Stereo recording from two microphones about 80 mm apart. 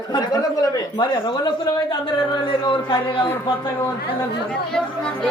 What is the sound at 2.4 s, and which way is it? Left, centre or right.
Speech, left.